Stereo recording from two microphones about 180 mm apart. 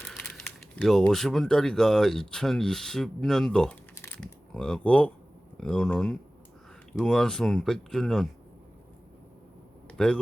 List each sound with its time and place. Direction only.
0.0 s speech: 5° left (ahead or behind)
10.0 s speech: 5° left (ahead or behind)